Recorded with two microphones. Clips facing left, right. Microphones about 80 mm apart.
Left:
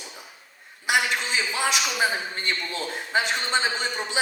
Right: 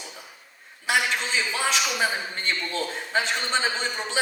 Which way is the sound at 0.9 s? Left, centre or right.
Centre.